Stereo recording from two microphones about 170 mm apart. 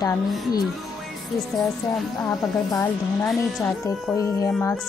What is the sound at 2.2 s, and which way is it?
Speech, 15° left (ahead or behind).